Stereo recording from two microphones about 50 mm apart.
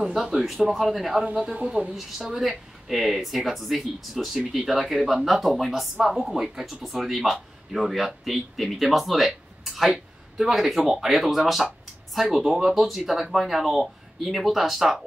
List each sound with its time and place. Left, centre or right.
0.0 s a man's voice: centre
1.2 s speech: centre
2.0 s speech: centre